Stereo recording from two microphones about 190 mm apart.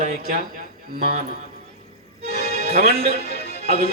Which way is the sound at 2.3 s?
55° left (ahead or behind).